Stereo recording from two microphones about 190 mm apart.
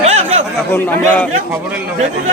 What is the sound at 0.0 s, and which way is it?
Chatter, 35° right (ahead or behind).